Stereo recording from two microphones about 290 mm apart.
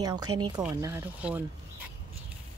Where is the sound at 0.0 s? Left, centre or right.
Centre.